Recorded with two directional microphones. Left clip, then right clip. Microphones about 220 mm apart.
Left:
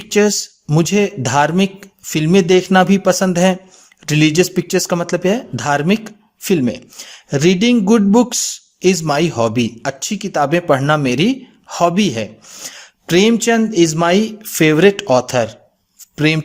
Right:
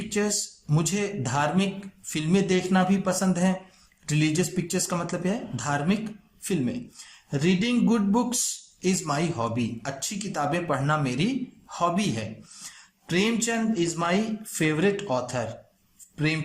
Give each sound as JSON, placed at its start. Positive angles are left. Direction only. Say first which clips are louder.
{"t": 0.0, "sound": "speech", "louder": "left 13 dB", "side_deg": 40}